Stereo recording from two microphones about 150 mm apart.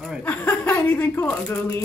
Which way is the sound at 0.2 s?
15° left (ahead or behind).